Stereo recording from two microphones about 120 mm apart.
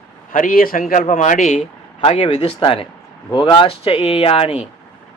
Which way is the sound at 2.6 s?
45° left (ahead or behind).